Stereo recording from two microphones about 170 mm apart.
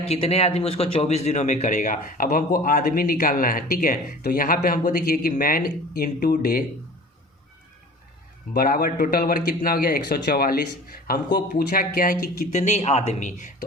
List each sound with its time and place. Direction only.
0.1 s a man's voice: 35° left (ahead or behind); by 6.7 s 60° left (ahead or behind)
8.5 s a man's voice: 60° left (ahead or behind)
12.4 s speech: 45° left (ahead or behind)